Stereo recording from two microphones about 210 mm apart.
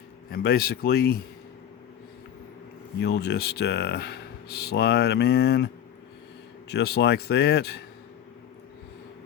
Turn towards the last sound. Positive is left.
turn(degrees=50)  # may be behind; listen again after turning